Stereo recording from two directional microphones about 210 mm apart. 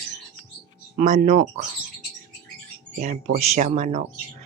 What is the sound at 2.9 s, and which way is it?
Speech, 35° right (ahead or behind).